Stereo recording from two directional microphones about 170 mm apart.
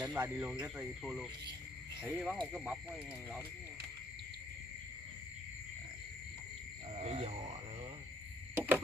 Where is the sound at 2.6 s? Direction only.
10° right (ahead or behind).